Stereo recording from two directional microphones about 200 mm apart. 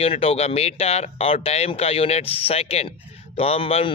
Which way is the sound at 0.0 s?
30° left (ahead or behind).